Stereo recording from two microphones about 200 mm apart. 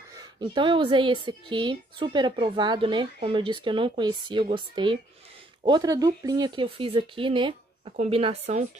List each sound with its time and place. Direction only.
0.4 s a woman's voice: 25° right (ahead or behind)